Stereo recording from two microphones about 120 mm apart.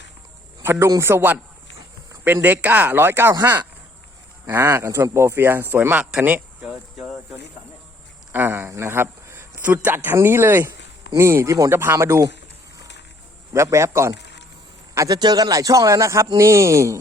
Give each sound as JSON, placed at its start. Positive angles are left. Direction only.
{"t": 0.6, "sound": "speech", "side_deg": -20}
{"t": 4.4, "sound": "speech", "side_deg": -20}
{"t": 6.9, "sound": "speech", "side_deg": 0}
{"t": 8.3, "sound": "a man's voice", "side_deg": -15}
{"t": 13.5, "sound": "speech", "side_deg": -25}